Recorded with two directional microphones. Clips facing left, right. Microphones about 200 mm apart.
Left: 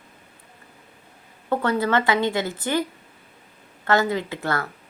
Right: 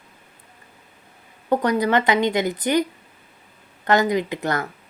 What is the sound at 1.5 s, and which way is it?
A woman's voice, 15° right (ahead or behind).